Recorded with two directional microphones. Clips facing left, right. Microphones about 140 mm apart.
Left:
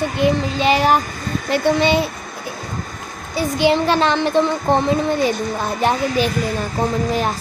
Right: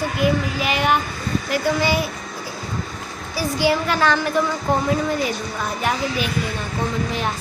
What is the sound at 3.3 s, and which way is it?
Speech, 20° left (ahead or behind).